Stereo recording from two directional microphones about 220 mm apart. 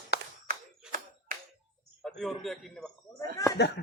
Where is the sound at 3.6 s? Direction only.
50° left (ahead or behind).